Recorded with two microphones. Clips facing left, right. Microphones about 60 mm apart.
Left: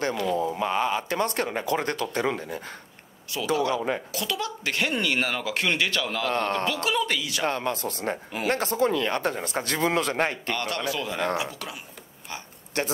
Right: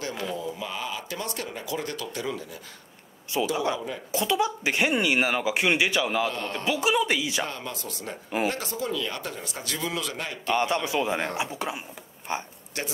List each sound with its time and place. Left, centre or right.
0.3 s speech: left
3.3 s speech: right
6.3 s speech: left
6.6 s speech: centre
7.4 s speech: left
10.5 s speech: right
12.7 s speech: left